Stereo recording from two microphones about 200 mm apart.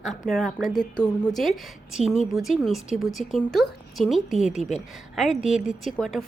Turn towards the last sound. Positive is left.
turn(degrees=0)  # may be behind; listen again after turning